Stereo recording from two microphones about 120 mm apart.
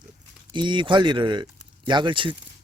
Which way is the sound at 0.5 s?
40° right (ahead or behind).